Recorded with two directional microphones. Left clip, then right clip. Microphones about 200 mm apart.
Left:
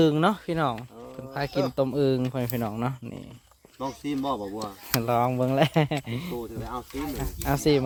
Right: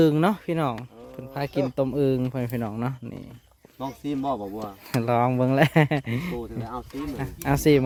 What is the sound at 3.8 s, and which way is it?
Speech, 20° right (ahead or behind).